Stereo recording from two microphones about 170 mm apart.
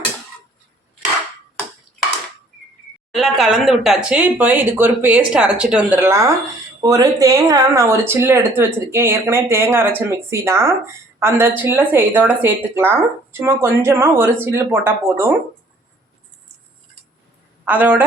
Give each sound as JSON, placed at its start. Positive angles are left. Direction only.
{"t": 3.2, "sound": "speech", "side_deg": 0}
{"t": 17.7, "sound": "speech", "side_deg": -10}